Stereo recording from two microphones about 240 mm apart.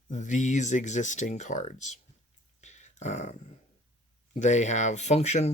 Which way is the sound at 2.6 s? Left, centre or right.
Left.